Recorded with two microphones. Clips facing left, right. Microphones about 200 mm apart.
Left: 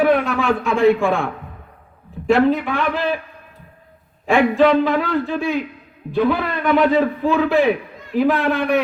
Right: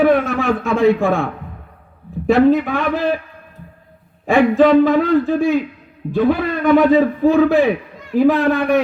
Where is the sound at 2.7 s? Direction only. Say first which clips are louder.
Right 2 dB; 50° right (ahead or behind).